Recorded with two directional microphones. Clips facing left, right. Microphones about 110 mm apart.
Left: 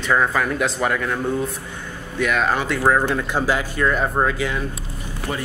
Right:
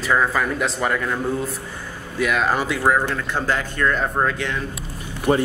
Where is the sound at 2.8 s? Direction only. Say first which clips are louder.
Left 1 dB; 5° left (ahead or behind).